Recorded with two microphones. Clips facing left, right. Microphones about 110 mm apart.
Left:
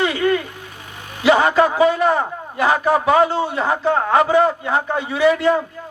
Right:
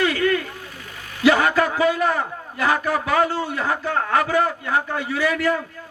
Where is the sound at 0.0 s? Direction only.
20° left (ahead or behind).